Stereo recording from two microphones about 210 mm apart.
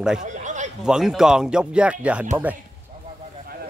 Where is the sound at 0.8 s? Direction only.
Centre (ahead or behind).